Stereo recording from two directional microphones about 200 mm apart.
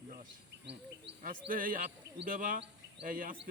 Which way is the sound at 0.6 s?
60° right (ahead or behind).